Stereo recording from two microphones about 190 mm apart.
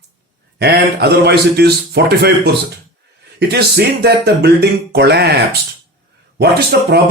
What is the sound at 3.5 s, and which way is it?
Speech, 60° right (ahead or behind).